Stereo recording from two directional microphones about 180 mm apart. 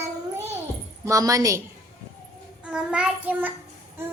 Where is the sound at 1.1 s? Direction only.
20° right (ahead or behind).